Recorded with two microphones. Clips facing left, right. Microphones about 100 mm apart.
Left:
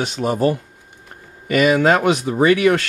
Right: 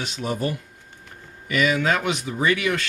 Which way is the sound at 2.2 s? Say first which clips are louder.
Left 8 dB; 45° left (ahead or behind).